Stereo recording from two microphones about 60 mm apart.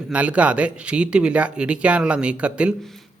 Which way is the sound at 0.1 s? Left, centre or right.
Right.